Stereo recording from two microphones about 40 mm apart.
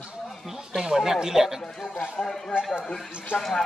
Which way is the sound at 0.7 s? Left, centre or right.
Centre.